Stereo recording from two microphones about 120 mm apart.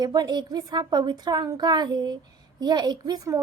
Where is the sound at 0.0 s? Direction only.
35° right (ahead or behind).